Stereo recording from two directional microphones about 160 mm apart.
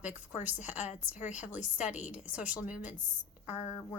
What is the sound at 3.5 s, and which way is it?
Speech, 45° left (ahead or behind).